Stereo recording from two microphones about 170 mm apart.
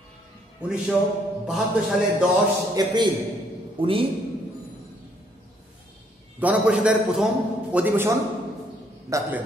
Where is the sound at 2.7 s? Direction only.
25° right (ahead or behind).